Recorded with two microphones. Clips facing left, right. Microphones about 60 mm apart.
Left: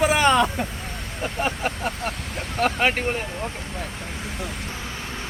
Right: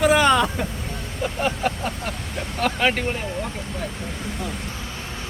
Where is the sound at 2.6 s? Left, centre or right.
Left.